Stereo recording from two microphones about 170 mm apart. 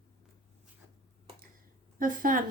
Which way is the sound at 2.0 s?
55° right (ahead or behind).